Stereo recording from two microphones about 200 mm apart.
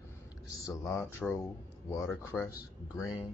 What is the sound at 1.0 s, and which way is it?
Speech, 10° left (ahead or behind).